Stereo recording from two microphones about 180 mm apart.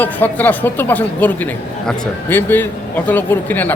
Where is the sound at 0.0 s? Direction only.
10° left (ahead or behind).